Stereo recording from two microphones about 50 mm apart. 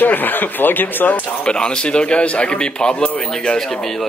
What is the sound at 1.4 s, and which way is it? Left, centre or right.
A man's voice, centre.